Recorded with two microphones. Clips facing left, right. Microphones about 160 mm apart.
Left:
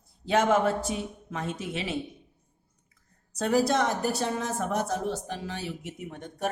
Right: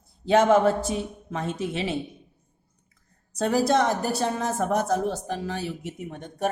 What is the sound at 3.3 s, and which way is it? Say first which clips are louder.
A woman's voice: right 3 dB; 30° right (ahead or behind).